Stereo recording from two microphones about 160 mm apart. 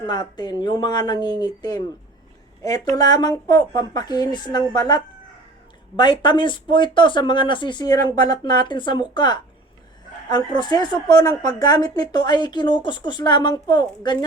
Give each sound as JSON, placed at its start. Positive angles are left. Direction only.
{"t": 0.0, "sound": "a woman's voice", "side_deg": 30}